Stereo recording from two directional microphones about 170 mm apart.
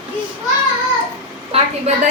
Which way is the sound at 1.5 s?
35° right (ahead or behind).